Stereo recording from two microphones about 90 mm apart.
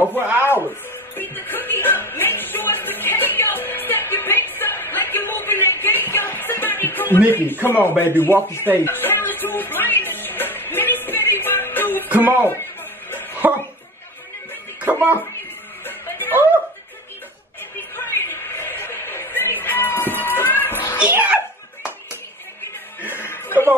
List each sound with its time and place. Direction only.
1.1 s music: 20° left (ahead or behind)
7.2 s speech: 25° left (ahead or behind)
8.5 s music: 25° left (ahead or behind)
12.1 s speech: 20° right (ahead or behind)
13.4 s a sound: 20° right (ahead or behind)
15.8 s music: 20° left (ahead or behind)
17.9 s music: 30° left (ahead or behind)
21.0 s a sound: 15° right (ahead or behind)
22.9 s music: 25° left (ahead or behind)